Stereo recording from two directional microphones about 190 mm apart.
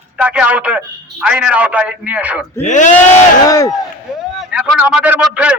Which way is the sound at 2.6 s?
40° left (ahead or behind).